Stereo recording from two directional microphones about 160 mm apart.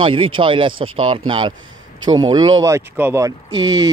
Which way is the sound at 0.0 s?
30° right (ahead or behind).